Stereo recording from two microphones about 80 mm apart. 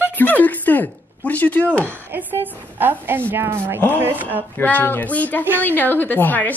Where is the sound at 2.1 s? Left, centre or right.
Right.